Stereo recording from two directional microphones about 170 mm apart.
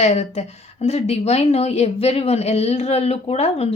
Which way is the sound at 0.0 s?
40° left (ahead or behind).